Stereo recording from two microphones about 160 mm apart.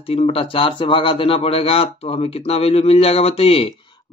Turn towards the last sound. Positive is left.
turn(degrees=35)  # may be behind; listen again after turning